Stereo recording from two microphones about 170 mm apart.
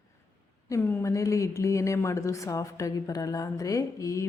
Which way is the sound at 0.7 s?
10° left (ahead or behind).